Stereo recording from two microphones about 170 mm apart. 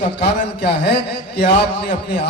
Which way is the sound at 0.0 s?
80° left.